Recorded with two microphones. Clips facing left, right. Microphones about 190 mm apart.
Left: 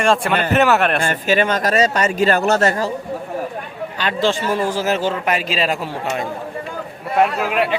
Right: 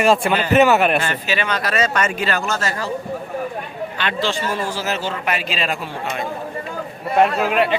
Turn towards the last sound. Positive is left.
turn(degrees=5)  # may be behind; listen again after turning